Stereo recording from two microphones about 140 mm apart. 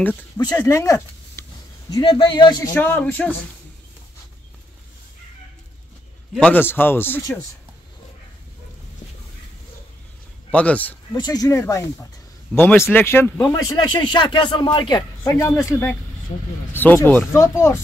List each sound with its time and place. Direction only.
0.4 s speech: 25° left (ahead or behind)
2.0 s speech: 35° left (ahead or behind)
2.7 s speech: 15° left (ahead or behind)
6.4 s speech: 15° left (ahead or behind)
10.5 s speech: 10° left (ahead or behind)
11.1 s speech: 30° left (ahead or behind)
13.4 s speech: 30° left (ahead or behind)